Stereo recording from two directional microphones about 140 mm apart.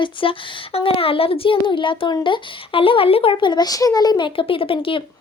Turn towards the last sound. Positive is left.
turn(degrees=40)  # may be behind; listen again after turning